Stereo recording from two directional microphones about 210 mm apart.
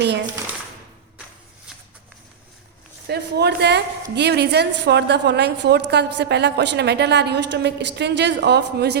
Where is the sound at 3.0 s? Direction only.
50° right (ahead or behind).